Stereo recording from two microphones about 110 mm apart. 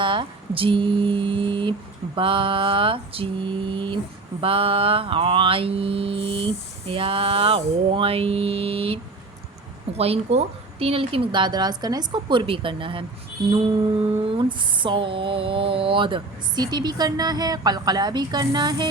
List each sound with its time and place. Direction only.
0.0 s music: 50° right (ahead or behind)
2.1 s speech: 50° right (ahead or behind)
4.4 s mantra: 55° right (ahead or behind)
10.0 s speech: 65° right (ahead or behind)
14.0 s a sound: 50° right (ahead or behind)